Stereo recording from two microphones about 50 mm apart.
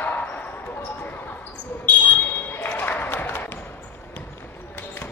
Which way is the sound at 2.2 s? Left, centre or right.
Left.